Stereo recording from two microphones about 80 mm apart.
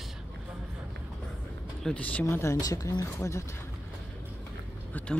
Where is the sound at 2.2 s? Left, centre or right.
Left.